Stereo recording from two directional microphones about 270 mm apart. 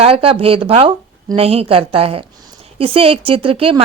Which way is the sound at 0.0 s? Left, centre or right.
Right.